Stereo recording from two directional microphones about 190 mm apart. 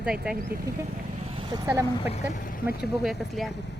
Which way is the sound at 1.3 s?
25° right (ahead or behind).